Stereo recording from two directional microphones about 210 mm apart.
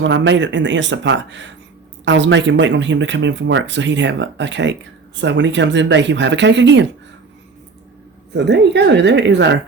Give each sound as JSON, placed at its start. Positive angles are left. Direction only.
{"t": 0.0, "sound": "speech", "side_deg": -60}
{"t": 8.3, "sound": "speech", "side_deg": -55}